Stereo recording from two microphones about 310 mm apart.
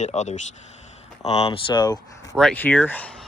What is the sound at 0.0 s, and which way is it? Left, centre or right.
Speech, left.